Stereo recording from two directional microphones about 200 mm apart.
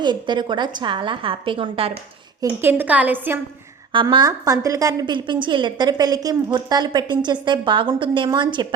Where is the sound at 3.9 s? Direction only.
20° right (ahead or behind).